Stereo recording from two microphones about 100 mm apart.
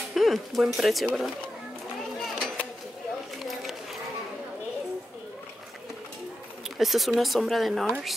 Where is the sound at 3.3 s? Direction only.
Centre (ahead or behind).